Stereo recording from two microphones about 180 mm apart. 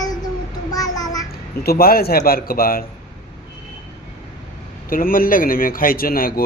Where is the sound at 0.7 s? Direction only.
20° left (ahead or behind).